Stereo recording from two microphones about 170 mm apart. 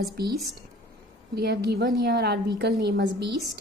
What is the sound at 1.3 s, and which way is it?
A woman's voice, 70° right (ahead or behind).